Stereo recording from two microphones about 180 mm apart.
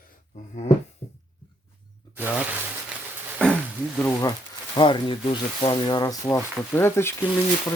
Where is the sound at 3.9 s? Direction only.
15° left (ahead or behind).